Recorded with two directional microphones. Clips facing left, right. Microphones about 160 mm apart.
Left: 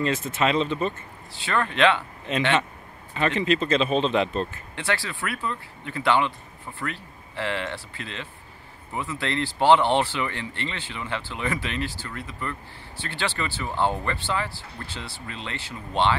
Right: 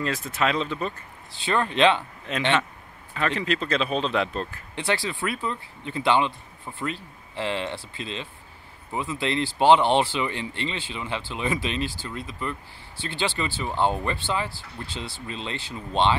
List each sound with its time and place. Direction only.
0.0 s speech: centre (ahead or behind)
1.4 s speech: 20° right (ahead or behind)
3.2 s speech: centre (ahead or behind)
4.7 s speech: 15° right (ahead or behind)